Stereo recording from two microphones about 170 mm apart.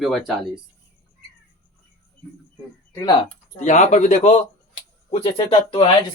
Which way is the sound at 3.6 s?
45° left (ahead or behind).